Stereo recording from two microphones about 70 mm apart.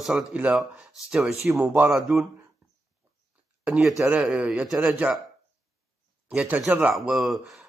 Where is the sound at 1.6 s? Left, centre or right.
Right.